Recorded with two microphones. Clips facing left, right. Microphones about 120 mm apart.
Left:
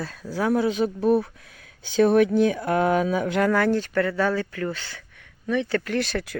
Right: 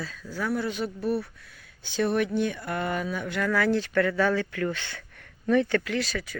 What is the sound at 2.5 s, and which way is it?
Speech, 90° left.